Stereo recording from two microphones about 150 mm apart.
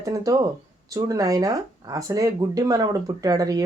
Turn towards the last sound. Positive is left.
turn(degrees=-25)  # may be behind; listen again after turning